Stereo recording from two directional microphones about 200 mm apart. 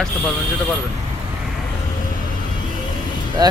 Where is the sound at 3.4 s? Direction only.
20° right (ahead or behind).